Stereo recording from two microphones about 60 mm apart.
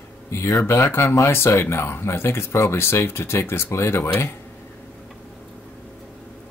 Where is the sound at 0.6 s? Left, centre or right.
Left.